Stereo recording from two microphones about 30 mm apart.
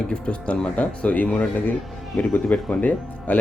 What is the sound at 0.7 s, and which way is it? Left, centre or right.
Speech, left.